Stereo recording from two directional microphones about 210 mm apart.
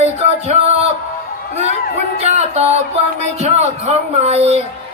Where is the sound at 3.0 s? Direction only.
30° right (ahead or behind).